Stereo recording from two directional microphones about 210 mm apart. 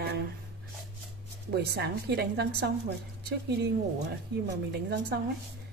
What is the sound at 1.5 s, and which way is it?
A woman's voice, 50° right (ahead or behind).